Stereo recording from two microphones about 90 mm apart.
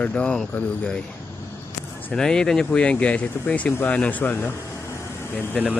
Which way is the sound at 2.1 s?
5° left (ahead or behind).